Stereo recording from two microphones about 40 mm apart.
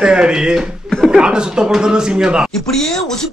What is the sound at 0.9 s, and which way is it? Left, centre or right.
Chuckle, left.